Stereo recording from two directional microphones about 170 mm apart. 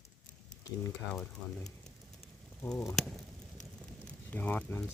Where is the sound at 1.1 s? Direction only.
Centre (ahead or behind).